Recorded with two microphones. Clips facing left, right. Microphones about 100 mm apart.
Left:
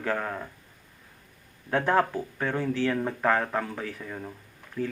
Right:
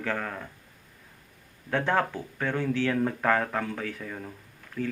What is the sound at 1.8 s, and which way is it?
Speech, 30° left (ahead or behind).